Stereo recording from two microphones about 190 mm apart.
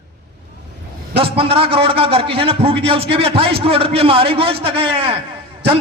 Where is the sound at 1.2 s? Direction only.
30° right (ahead or behind).